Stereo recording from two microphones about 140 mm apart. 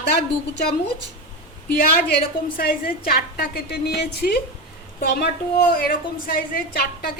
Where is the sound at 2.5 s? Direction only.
90° left.